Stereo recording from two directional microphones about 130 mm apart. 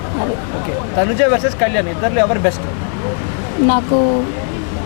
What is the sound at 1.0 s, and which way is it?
A woman's voice, 15° left (ahead or behind).